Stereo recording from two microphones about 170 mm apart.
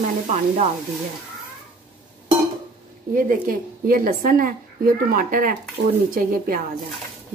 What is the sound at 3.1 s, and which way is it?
Speech, 55° right (ahead or behind).